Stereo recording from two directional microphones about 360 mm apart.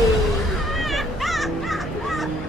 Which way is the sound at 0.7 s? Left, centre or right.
Centre.